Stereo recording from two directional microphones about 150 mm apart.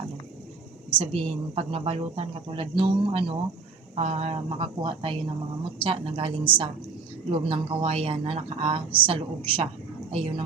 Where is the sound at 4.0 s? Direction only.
45° right (ahead or behind).